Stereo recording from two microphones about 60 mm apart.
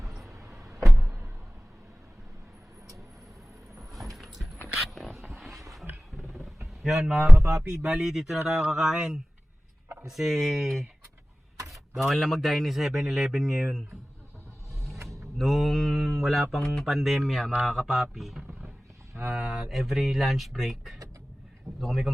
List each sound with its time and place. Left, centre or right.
0.0 s vehicle: centre
0.3 s vehicle: right
1.0 s a sound: right
3.8 s vehicle: centre
5.2 s a sound: centre
6.1 s music: centre
6.8 s speech: centre
7.3 s speech: right
7.8 s speech: centre
15.4 s speech: centre